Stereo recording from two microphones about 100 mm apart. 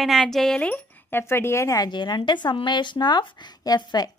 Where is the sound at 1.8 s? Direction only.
50° left (ahead or behind).